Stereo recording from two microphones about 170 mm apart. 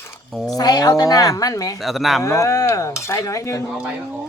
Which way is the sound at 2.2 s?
20° left (ahead or behind).